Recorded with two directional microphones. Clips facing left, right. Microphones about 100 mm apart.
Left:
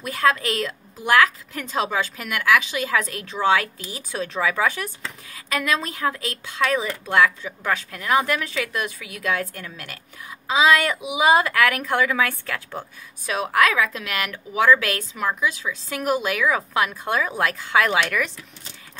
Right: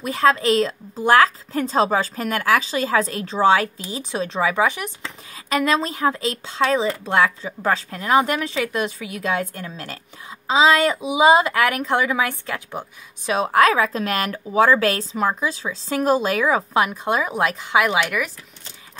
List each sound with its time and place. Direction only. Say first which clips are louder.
0.0 s a woman's voice: right 3 dB; 25° right (ahead or behind)